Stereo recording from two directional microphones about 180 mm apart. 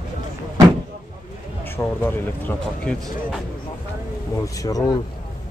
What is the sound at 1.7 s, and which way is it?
Speech, 10° left (ahead or behind).